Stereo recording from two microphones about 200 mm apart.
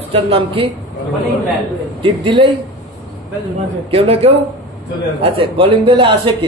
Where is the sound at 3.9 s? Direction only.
30° right (ahead or behind).